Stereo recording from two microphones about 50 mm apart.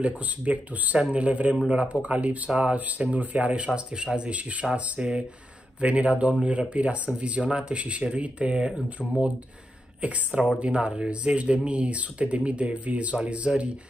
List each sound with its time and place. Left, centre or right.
0.0 s speech: right
10.0 s speech: right